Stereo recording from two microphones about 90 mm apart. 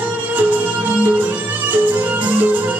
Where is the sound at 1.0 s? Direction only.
15° right (ahead or behind).